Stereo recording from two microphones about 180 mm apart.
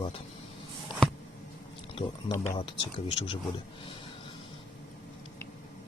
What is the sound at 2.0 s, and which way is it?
Speech, 30° left (ahead or behind).